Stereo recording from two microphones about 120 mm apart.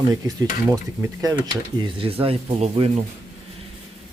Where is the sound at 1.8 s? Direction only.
50° right (ahead or behind).